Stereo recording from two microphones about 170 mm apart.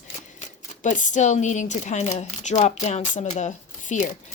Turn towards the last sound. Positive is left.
turn(degrees=45)  # may be behind; listen again after turning